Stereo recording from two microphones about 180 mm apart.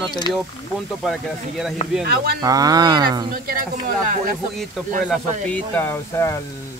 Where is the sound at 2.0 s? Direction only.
60° right (ahead or behind).